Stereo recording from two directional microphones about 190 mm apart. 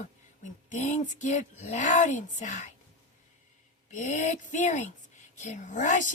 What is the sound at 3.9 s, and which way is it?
A woman's voice, 40° left (ahead or behind).